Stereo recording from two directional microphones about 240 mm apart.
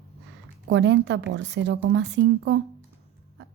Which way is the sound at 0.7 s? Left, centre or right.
Right.